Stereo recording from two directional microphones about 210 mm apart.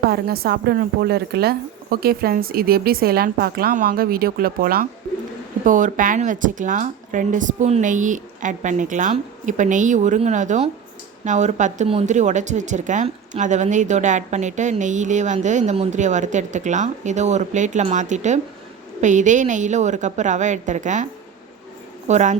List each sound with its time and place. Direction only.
0.1 s a woman's voice: 50° right (ahead or behind)